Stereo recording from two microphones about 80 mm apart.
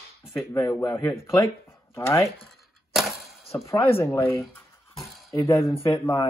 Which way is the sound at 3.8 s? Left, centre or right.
Left.